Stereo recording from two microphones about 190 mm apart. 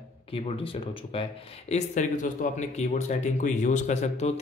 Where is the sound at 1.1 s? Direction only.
30° left (ahead or behind).